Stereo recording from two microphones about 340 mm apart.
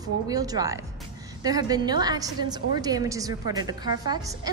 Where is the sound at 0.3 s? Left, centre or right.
Centre.